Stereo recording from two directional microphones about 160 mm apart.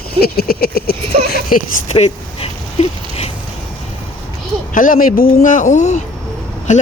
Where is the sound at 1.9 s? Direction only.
40° left (ahead or behind).